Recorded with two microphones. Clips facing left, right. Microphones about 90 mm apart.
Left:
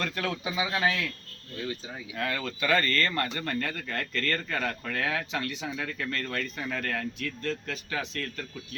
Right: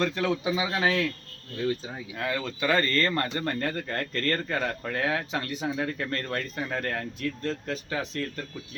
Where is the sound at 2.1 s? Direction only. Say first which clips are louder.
Right 1 dB; 15° right (ahead or behind).